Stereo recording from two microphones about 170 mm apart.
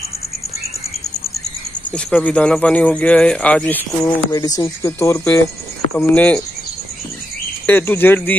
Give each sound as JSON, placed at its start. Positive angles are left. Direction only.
{"t": 1.9, "sound": "speech", "side_deg": 10}
{"t": 4.3, "sound": "speech", "side_deg": 20}
{"t": 7.6, "sound": "speech", "side_deg": 10}